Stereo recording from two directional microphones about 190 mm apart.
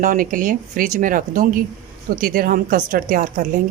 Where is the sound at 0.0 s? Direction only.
45° right (ahead or behind).